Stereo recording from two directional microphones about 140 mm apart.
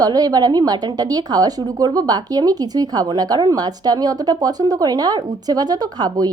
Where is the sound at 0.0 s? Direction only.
30° right (ahead or behind).